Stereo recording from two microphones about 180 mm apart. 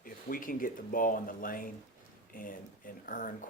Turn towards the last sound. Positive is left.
turn(degrees=50)  # may be behind; listen again after turning